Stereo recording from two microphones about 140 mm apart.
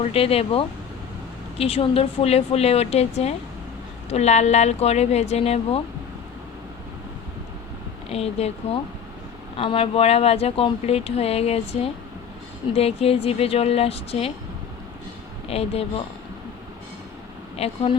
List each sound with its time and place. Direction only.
0.0 s speech: 45° left (ahead or behind)
8.1 s speech: 50° left (ahead or behind)
15.4 s speech: 45° left (ahead or behind)
17.6 s speech: 45° left (ahead or behind)